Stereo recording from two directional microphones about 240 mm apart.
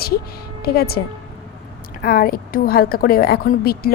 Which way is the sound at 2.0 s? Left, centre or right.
Left.